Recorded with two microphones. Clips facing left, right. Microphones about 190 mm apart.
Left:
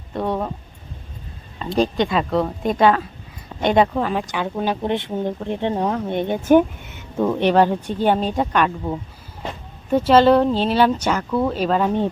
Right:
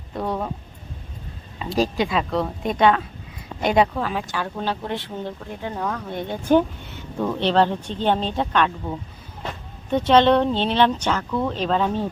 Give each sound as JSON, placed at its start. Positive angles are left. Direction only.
{"t": 0.1, "sound": "a sound", "side_deg": 0}
{"t": 1.5, "sound": "speech", "side_deg": -5}
{"t": 4.3, "sound": "speech", "side_deg": 15}
{"t": 9.9, "sound": "speech", "side_deg": 5}